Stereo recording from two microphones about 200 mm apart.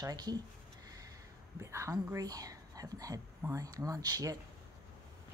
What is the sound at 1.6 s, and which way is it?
Speech, 15° right (ahead or behind).